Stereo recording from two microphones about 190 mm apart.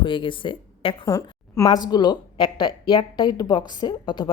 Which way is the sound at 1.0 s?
15° left (ahead or behind).